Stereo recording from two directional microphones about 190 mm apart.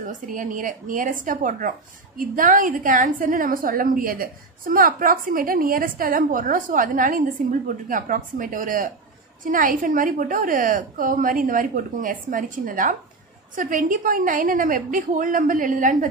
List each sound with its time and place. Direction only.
0.0 s a woman's voice: 45° right (ahead or behind)